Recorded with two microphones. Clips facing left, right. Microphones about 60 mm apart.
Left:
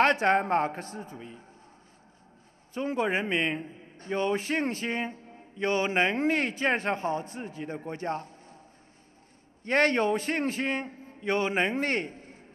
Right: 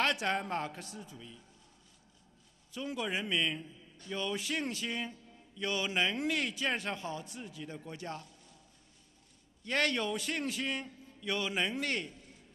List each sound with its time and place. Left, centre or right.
0.0 s a man's voice: left
2.7 s a man's voice: left
9.6 s a man's voice: left